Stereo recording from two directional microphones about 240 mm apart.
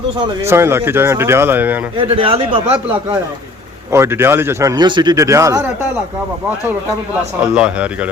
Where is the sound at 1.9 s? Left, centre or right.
Right.